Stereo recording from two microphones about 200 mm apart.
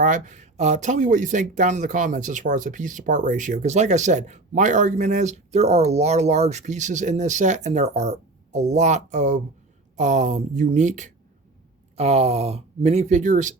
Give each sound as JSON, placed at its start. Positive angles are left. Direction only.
{"t": 0.0, "sound": "speech", "side_deg": -40}